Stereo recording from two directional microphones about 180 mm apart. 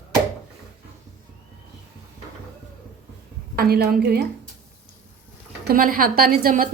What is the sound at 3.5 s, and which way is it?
Speech, 60° right (ahead or behind).